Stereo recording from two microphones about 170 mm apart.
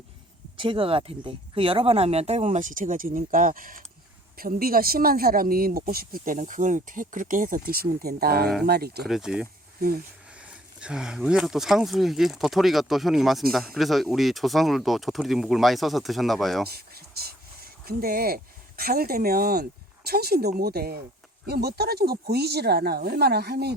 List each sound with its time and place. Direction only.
0.5 s speech: 30° right (ahead or behind); by 9.0 s 70° right (ahead or behind)
9.0 s speech: centre (ahead or behind)
16.6 s speech: 65° right (ahead or behind)